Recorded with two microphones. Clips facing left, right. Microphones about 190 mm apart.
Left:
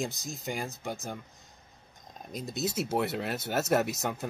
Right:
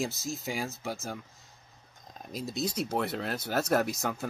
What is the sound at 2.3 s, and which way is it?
Speech, centre (ahead or behind).